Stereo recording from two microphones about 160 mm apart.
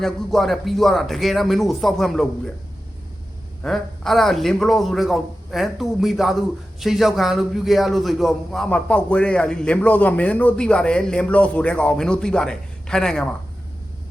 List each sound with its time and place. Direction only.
0.0 s a man's voice: centre (ahead or behind)
3.6 s a man's voice: centre (ahead or behind)